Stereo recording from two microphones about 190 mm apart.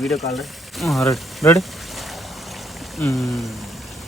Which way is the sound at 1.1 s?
15° left (ahead or behind).